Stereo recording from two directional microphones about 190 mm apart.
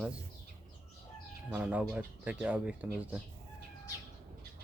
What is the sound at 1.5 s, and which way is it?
Speech, 5° right (ahead or behind).